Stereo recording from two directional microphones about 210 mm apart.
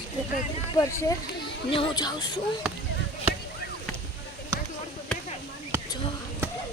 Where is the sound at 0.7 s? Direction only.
15° left (ahead or behind).